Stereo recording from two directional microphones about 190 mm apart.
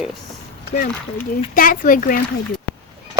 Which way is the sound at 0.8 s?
45° left (ahead or behind).